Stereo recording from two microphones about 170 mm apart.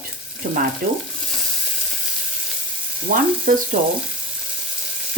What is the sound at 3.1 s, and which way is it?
Frying, 55° right (ahead or behind).